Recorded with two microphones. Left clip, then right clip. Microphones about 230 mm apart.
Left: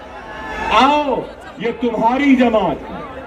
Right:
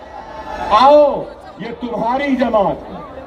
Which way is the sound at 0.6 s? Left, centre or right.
Right.